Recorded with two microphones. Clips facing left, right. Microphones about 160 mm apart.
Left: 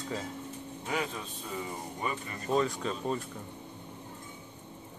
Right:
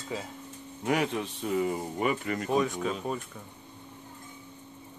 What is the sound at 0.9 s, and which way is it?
A man's voice, 75° right (ahead or behind).